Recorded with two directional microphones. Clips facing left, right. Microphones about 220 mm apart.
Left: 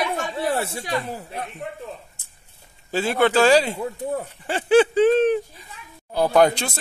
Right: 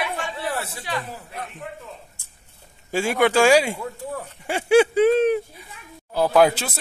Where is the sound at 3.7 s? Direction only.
20° left (ahead or behind).